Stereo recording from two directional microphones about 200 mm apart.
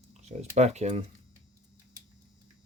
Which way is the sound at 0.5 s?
35° right (ahead or behind).